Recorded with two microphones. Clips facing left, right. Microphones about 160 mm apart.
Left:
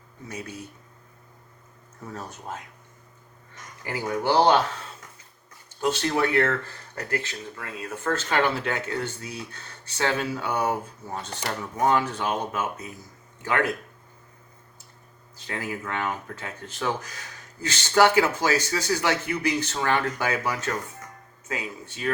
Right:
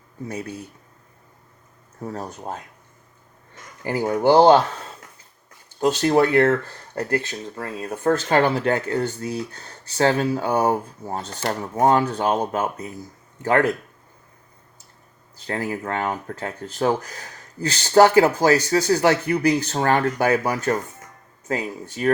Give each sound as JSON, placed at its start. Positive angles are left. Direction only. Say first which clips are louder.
{"t": 2.0, "sound": "speech", "louder": "right 6 dB", "side_deg": -35}
{"t": 3.9, "sound": "speech", "louder": "right 6 dB", "side_deg": -35}
{"t": 4.2, "sound": "speech", "louder": "right 7 dB", "side_deg": -20}
{"t": 6.1, "sound": "speech", "louder": "right 8 dB", "side_deg": -40}
{"t": 15.4, "sound": "speech", "louder": "right 6 dB", "side_deg": -40}